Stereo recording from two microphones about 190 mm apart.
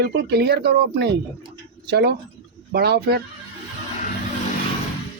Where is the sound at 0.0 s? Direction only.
60° right (ahead or behind).